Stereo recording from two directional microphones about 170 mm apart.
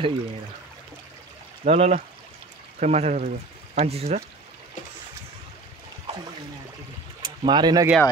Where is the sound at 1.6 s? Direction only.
40° right (ahead or behind).